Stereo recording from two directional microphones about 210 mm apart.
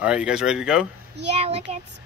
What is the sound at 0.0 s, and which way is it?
Speech, 5° right (ahead or behind).